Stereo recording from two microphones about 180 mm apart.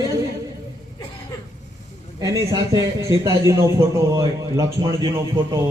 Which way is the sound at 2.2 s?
20° right (ahead or behind).